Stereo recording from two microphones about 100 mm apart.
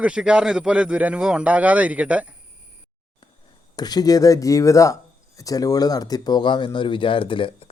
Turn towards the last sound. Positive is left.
turn(degrees=65)  # may be behind; listen again after turning